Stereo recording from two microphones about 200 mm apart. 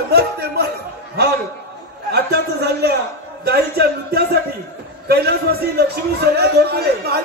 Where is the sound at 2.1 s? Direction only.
55° right (ahead or behind).